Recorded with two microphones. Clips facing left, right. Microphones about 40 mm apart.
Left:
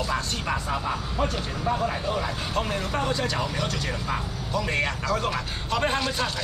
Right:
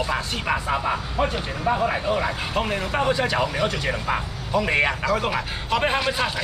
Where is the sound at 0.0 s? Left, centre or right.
Right.